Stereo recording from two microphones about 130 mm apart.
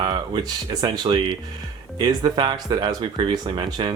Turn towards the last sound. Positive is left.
turn(degrees=-35)  # may be behind; listen again after turning